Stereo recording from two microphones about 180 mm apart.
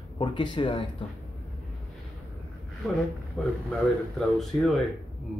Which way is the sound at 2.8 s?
5° left (ahead or behind).